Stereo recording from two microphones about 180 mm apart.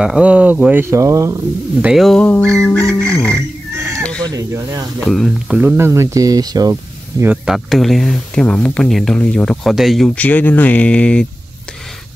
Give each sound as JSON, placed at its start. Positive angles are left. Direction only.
{"t": 0.0, "sound": "speech", "side_deg": -5}
{"t": 1.9, "sound": "speech", "side_deg": 0}
{"t": 4.2, "sound": "speech", "side_deg": -20}
{"t": 5.0, "sound": "speech", "side_deg": 0}
{"t": 7.4, "sound": "speech", "side_deg": 0}